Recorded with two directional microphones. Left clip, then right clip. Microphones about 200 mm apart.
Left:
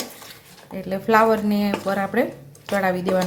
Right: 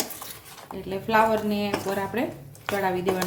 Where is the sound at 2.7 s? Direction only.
35° left (ahead or behind).